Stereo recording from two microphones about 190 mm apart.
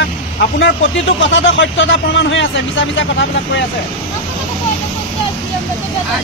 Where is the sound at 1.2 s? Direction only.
75° left (ahead or behind).